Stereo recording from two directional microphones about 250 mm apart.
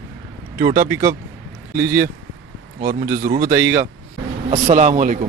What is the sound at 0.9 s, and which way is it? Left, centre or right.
Speech, centre.